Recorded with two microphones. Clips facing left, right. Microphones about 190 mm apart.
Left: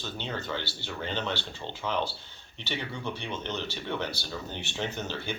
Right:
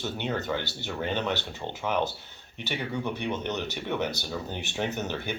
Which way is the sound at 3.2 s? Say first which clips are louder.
Right 4 dB; 15° right (ahead or behind).